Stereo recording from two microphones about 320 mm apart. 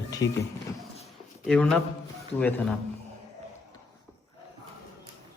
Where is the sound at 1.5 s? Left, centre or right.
Centre.